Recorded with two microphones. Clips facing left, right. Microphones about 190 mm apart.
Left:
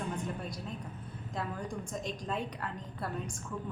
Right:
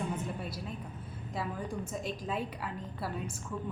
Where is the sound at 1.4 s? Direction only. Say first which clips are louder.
Right 1 dB; 5° right (ahead or behind).